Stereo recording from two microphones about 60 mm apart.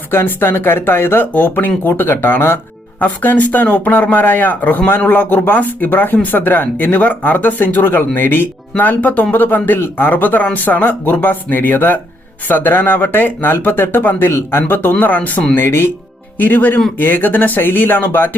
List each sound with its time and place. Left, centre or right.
0.1 s speech: left
14.9 s speech: left
15.5 s speech: left
16.4 s speech: left